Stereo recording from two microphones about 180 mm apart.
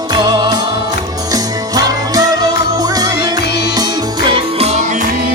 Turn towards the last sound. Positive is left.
turn(degrees=-30)  # may be behind; listen again after turning